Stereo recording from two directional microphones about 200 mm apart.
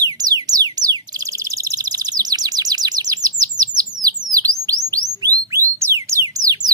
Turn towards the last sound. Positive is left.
turn(degrees=-20)  # may be behind; listen again after turning